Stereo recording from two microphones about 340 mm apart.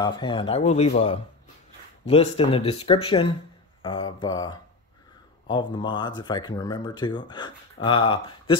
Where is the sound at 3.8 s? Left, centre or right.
Centre.